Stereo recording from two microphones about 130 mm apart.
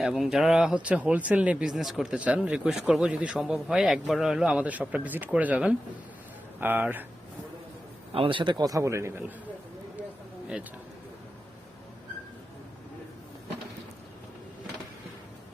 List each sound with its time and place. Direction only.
0.0 s speech: 5° right (ahead or behind)
8.1 s a man's voice: 40° right (ahead or behind); by 9.2 s 20° right (ahead or behind)